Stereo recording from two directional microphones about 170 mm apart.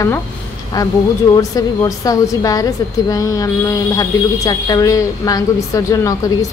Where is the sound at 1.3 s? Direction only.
20° left (ahead or behind).